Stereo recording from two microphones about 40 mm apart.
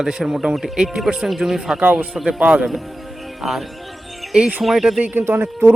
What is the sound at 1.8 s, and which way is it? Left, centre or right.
Speech, right.